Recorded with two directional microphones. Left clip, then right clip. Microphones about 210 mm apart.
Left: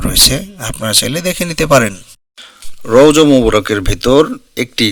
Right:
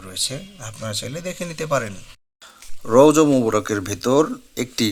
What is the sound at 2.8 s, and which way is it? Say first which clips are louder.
Speech: left 6 dB; 20° left (ahead or behind).